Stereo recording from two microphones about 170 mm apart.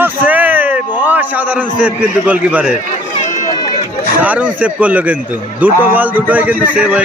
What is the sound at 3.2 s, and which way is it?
Run, 50° left (ahead or behind).